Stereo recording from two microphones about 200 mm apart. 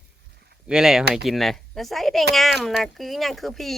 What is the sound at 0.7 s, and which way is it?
Speech, 5° right (ahead or behind).